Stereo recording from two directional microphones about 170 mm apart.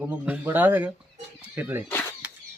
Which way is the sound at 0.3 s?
10° right (ahead or behind).